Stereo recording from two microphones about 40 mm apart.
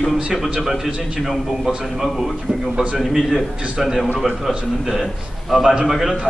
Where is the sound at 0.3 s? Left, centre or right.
Centre.